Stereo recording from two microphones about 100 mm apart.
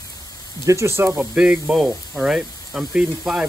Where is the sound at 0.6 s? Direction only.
30° right (ahead or behind).